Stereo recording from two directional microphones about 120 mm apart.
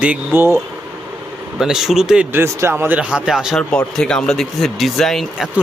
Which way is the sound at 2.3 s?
20° right (ahead or behind).